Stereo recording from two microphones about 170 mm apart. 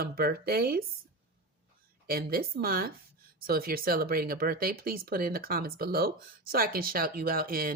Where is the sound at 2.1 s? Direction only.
60° right (ahead or behind).